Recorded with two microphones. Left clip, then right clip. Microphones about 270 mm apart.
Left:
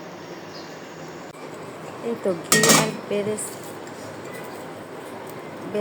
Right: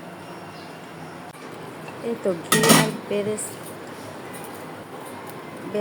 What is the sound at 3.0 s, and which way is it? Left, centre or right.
Speech, centre.